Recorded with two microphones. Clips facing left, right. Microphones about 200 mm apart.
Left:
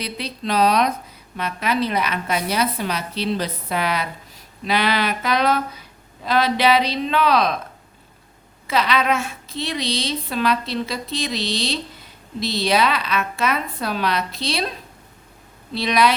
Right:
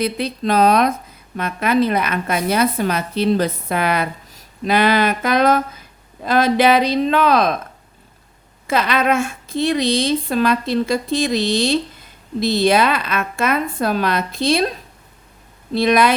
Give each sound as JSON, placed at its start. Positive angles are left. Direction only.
{"t": 0.0, "sound": "a woman's voice", "side_deg": -50}
{"t": 8.6, "sound": "a woman's voice", "side_deg": -50}
{"t": 15.7, "sound": "a woman's voice", "side_deg": -50}